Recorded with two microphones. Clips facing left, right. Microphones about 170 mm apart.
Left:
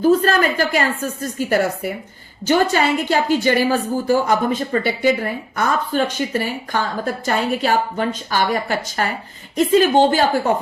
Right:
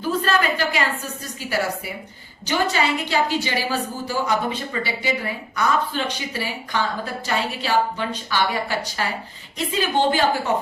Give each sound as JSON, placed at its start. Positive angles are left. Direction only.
{"t": 0.0, "sound": "a woman's voice", "side_deg": 45}